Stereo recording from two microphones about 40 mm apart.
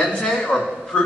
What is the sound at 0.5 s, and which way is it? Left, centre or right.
Speech, left.